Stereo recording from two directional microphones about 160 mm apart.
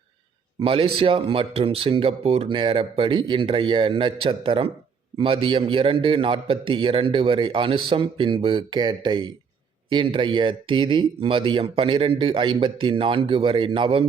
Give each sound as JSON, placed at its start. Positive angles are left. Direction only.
{"t": 0.6, "sound": "a man's voice", "side_deg": -35}